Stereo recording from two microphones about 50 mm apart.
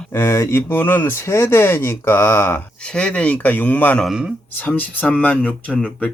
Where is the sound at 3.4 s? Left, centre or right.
Left.